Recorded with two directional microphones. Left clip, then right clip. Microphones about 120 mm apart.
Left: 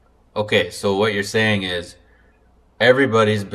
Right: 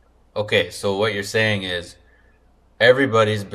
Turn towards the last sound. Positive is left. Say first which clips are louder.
# left 1 dB
turn(degrees=-5)  # may be behind; listen again after turning